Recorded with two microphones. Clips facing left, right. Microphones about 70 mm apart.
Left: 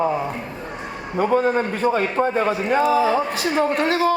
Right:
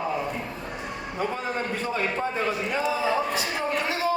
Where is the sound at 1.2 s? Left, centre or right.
Left.